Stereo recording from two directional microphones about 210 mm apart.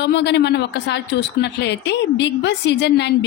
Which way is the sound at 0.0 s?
55° left (ahead or behind).